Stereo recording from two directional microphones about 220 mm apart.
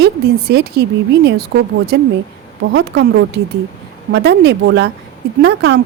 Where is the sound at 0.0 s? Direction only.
45° right (ahead or behind).